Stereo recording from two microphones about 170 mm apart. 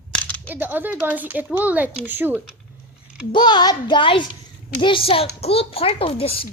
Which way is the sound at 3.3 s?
25° left (ahead or behind).